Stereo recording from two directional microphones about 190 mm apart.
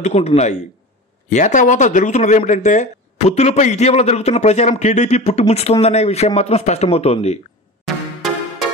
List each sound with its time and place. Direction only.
0.0 s speech: 35° left (ahead or behind)
7.8 s music: centre (ahead or behind)